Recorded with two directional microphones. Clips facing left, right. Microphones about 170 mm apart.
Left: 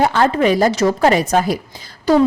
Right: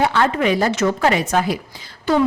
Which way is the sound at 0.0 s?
40° left (ahead or behind).